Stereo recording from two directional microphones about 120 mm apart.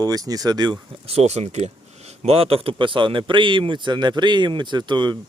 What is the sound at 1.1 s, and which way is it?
Speech, 60° right (ahead or behind).